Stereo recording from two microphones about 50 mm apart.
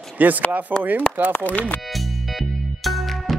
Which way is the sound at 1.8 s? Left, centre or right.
Centre.